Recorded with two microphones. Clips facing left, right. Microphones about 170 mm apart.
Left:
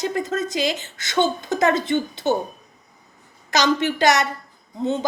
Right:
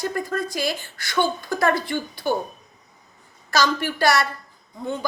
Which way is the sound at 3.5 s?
20° left (ahead or behind).